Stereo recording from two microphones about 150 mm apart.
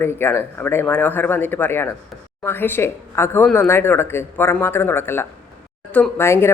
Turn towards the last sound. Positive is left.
turn(degrees=15)  # may be behind; listen again after turning